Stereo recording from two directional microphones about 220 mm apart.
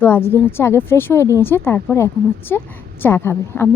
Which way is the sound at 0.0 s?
10° left (ahead or behind).